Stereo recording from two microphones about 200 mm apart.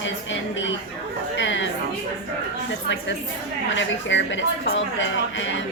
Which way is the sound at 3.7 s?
65° left (ahead or behind).